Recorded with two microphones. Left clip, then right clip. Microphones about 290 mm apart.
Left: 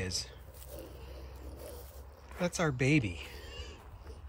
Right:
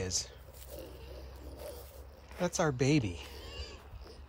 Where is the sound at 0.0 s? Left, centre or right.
Centre.